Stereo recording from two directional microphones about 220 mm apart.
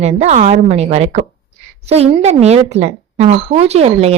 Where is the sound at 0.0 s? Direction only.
30° right (ahead or behind).